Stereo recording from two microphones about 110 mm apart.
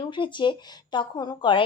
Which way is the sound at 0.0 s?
45° left (ahead or behind).